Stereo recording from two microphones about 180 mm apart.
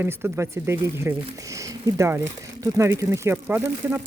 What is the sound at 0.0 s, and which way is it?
Speech, 15° right (ahead or behind).